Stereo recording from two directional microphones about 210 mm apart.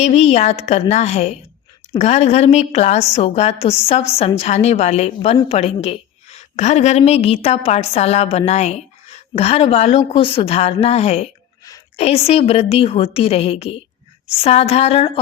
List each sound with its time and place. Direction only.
0.0 s a woman's voice: 30° left (ahead or behind)